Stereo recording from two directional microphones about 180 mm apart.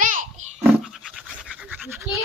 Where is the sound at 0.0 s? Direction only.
45° right (ahead or behind).